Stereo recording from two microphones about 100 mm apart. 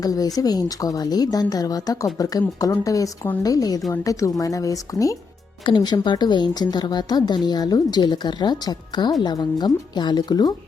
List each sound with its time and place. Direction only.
0.0 s speech: 40° left (ahead or behind)
5.6 s a woman's voice: 45° left (ahead or behind)